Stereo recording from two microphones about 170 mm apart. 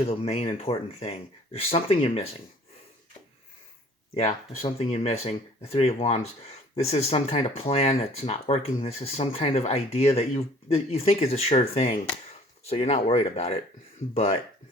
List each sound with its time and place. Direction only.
0.0 s speech: 35° left (ahead or behind)
4.1 s speech: 40° left (ahead or behind)